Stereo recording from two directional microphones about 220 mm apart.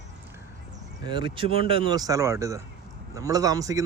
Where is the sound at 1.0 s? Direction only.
20° right (ahead or behind).